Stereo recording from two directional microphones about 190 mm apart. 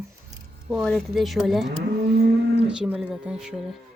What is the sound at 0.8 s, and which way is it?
Speech, centre (ahead or behind).